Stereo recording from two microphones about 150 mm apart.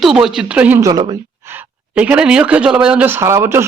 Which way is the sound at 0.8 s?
25° right (ahead or behind).